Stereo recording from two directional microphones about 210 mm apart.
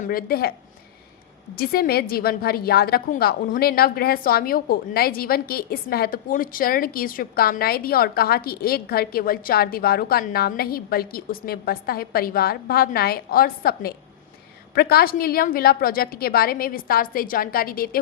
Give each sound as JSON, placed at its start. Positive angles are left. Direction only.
{"t": 0.0, "sound": "a woman's voice", "side_deg": 45}
{"t": 1.5, "sound": "a woman's voice", "side_deg": 45}